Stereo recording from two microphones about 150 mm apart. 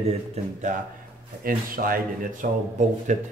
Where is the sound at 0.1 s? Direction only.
55° right (ahead or behind).